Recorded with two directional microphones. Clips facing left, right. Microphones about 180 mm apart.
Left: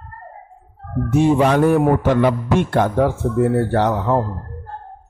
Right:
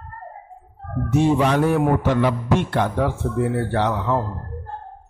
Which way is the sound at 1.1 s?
50° left (ahead or behind).